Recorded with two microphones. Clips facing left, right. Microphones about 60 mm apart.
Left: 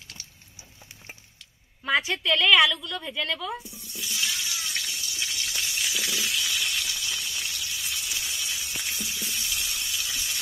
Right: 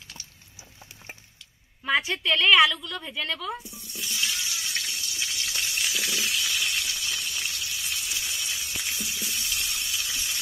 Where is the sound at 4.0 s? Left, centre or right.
Right.